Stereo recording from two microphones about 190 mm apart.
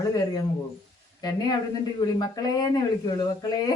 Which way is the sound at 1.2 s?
20° left (ahead or behind).